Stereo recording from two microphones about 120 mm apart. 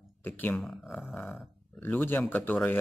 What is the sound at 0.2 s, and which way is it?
Speech, 15° left (ahead or behind).